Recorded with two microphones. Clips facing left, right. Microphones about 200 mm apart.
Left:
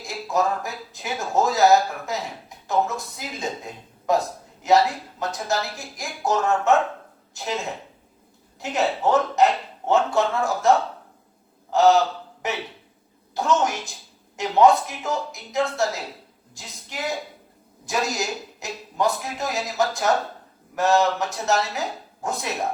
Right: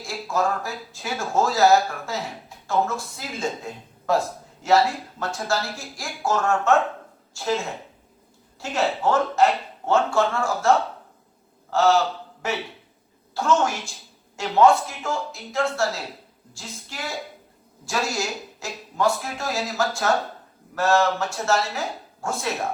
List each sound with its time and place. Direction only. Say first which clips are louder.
0.0 s speech: left 1 dB; 20° left (ahead or behind)
8.6 s speech: even; 20° left (ahead or behind)
11.7 s speech: left 2 dB; 20° left (ahead or behind)